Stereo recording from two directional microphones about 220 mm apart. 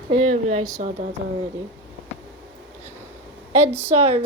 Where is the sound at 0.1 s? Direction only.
30° right (ahead or behind).